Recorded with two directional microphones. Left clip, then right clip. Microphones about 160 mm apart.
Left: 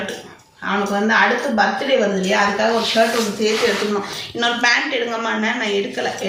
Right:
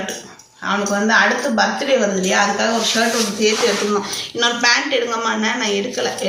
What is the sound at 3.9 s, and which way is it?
A woman's voice, 20° left (ahead or behind).